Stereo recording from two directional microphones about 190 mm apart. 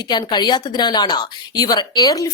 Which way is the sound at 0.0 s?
20° left (ahead or behind).